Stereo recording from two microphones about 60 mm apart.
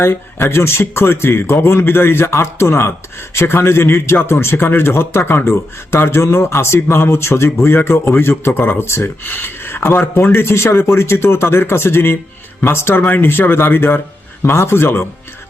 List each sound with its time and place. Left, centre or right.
0.0 s speech: left